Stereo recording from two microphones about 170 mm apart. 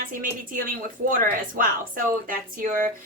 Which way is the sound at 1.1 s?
55° right (ahead or behind).